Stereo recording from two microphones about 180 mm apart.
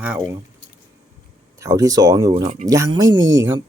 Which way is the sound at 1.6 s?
20° right (ahead or behind).